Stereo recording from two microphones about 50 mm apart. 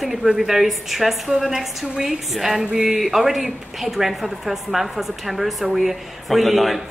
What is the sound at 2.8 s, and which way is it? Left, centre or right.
A man's voice, centre.